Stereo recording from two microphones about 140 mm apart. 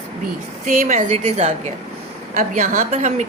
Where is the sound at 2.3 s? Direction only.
70° right (ahead or behind).